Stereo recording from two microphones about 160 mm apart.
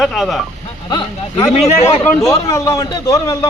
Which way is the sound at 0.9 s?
25° left (ahead or behind).